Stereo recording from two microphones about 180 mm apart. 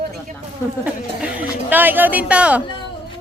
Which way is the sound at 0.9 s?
10° right (ahead or behind).